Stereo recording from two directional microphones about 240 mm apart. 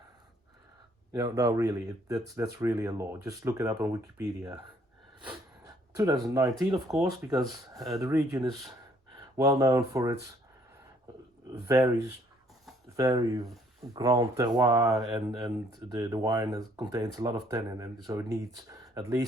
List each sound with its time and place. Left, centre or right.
1.1 s speech: centre
5.3 s speech: centre
13.0 s speech: centre
14.8 s speech: centre
15.9 s speech: centre